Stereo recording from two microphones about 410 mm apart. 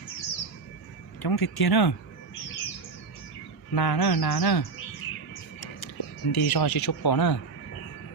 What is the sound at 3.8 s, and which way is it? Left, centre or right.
Speech, left.